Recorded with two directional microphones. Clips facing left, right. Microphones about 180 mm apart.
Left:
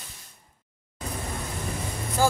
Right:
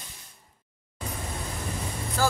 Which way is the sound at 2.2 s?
15° left (ahead or behind).